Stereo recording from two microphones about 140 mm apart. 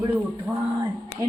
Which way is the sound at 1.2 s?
20° right (ahead or behind).